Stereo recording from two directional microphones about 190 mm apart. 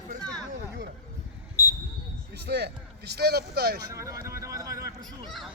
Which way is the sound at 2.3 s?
60° right (ahead or behind).